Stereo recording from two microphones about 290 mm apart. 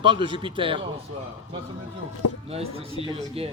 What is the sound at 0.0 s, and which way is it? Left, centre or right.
Speech, centre.